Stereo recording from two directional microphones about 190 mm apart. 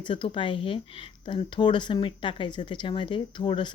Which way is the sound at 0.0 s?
25° left (ahead or behind).